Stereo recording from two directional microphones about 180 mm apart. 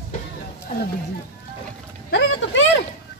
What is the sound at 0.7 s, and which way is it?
Speech, 50° left (ahead or behind).